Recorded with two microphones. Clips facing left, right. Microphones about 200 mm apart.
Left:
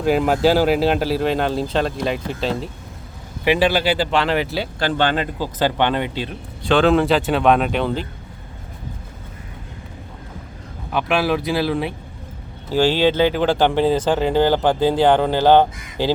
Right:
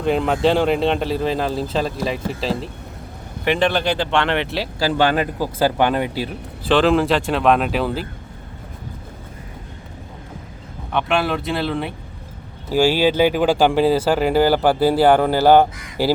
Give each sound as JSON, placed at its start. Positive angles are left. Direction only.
{"t": 0.0, "sound": "speech", "side_deg": 5}
{"t": 10.9, "sound": "speech", "side_deg": 0}
{"t": 12.7, "sound": "speech", "side_deg": -10}